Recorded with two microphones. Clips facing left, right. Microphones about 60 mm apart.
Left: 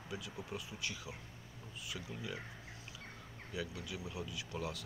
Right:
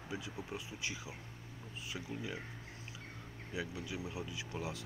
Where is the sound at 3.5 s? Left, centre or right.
Right.